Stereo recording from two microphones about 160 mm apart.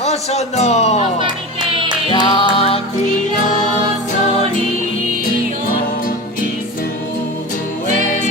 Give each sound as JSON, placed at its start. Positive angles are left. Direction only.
{"t": 0.0, "sound": "speech", "side_deg": 40}
{"t": 2.0, "sound": "music", "side_deg": 30}